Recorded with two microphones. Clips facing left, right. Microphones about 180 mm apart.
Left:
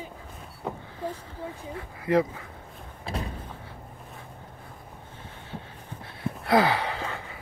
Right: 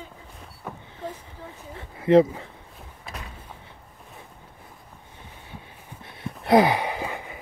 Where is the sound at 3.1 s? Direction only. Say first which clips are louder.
Left 7 dB; 30° left (ahead or behind).